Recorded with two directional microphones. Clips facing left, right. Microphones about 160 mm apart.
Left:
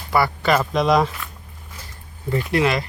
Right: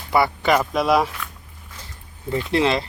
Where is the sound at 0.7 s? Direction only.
5° right (ahead or behind).